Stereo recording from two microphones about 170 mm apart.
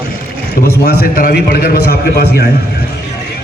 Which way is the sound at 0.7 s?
65° left (ahead or behind).